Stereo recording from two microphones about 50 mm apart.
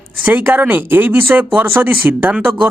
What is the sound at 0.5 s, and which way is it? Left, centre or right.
Speech, right.